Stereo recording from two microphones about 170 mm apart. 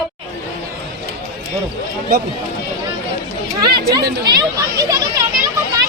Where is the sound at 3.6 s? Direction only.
25° right (ahead or behind).